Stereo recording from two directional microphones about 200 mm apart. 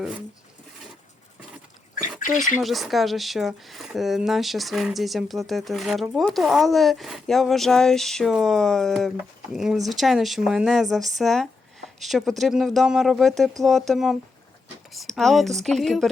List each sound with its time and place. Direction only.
2.0 s drip: 40° left (ahead or behind)
2.6 s speech: centre (ahead or behind)